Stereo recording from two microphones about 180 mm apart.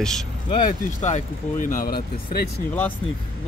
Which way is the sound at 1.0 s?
40° left (ahead or behind).